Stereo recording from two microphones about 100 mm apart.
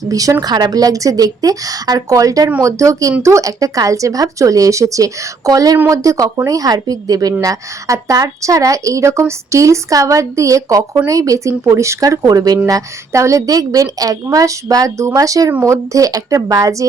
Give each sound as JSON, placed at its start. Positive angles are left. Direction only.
{"t": 0.1, "sound": "a woman's voice", "side_deg": -35}